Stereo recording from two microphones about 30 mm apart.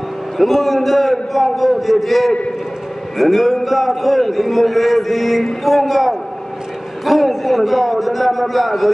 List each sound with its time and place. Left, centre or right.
0.4 s a man's voice: centre